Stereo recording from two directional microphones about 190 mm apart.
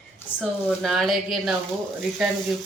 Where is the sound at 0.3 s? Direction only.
Centre (ahead or behind).